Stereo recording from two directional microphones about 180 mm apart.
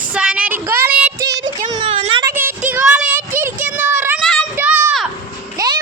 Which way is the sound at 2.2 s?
10° right (ahead or behind).